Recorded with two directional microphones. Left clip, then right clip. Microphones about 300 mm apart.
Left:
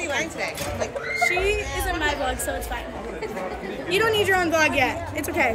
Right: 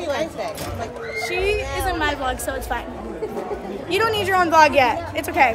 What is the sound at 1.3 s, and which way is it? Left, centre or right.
A woman's voice, centre.